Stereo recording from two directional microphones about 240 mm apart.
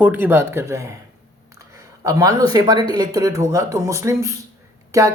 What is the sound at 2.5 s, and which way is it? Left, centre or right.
A woman's voice, centre.